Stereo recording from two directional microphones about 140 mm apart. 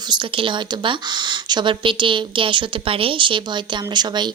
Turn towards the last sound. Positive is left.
turn(degrees=-30)  # may be behind; listen again after turning